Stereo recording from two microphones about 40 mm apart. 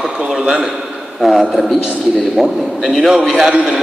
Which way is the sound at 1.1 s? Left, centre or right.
Centre.